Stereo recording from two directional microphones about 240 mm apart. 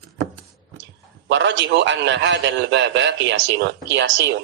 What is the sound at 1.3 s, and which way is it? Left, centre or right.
A man's voice, right.